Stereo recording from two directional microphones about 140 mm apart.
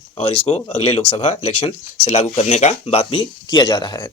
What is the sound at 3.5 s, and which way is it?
Speech, 30° left (ahead or behind).